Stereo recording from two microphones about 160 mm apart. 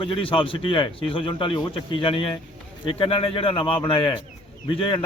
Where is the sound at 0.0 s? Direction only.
35° left (ahead or behind).